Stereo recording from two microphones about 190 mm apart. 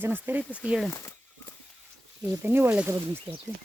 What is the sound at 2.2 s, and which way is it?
Speech, 10° right (ahead or behind).